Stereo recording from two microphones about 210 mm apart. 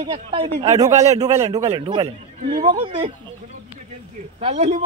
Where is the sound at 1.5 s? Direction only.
20° right (ahead or behind).